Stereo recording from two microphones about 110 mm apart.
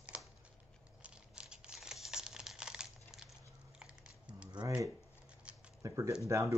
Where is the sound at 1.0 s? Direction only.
10° right (ahead or behind).